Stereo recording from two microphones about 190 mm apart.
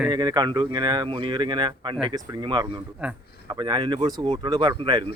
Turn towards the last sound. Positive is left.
turn(degrees=-25)  # may be behind; listen again after turning